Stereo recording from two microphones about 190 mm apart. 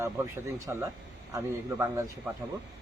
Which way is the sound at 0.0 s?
15° right (ahead or behind).